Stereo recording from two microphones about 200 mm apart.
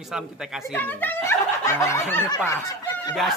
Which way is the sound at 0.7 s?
10° left (ahead or behind).